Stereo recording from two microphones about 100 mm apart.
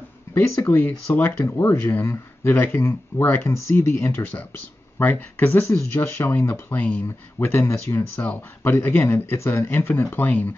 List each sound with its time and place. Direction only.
0.3 s speech: 25° left (ahead or behind)